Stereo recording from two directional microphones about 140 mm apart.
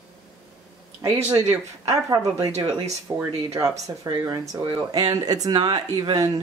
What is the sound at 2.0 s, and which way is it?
Speech, 25° right (ahead or behind).